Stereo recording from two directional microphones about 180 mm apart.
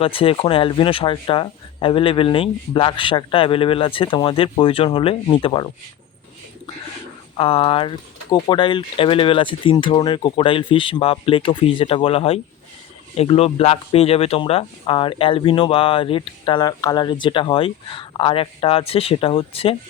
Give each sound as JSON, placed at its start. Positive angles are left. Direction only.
{"t": 0.0, "sound": "speech", "side_deg": 30}
{"t": 7.3, "sound": "speech", "side_deg": 30}